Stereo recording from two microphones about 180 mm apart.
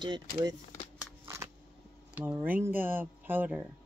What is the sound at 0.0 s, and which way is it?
Speech, 25° right (ahead or behind).